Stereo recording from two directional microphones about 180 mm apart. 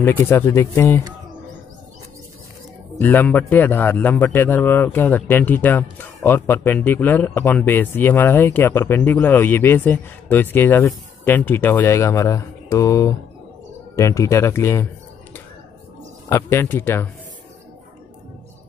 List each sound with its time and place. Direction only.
0.0 s speech: 10° left (ahead or behind)
3.0 s speech: 10° left (ahead or behind)
16.3 s speech: 15° left (ahead or behind)